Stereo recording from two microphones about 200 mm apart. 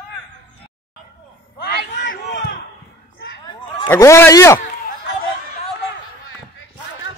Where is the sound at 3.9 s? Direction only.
10° left (ahead or behind).